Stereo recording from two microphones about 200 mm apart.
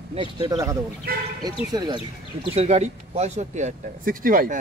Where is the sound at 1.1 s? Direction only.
50° right (ahead or behind).